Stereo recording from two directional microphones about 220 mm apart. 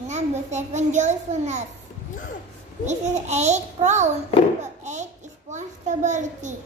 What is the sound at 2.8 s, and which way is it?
A child's voice, 30° right (ahead or behind).